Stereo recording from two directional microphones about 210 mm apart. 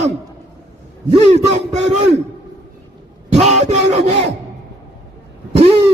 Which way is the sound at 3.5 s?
35° right (ahead or behind).